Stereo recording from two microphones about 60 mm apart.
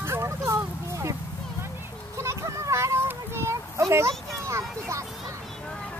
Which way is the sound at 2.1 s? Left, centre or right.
Right.